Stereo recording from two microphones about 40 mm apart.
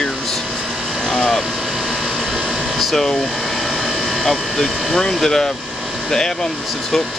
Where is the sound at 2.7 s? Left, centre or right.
Centre.